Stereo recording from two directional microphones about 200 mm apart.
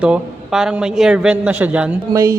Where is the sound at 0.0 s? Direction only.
5° right (ahead or behind).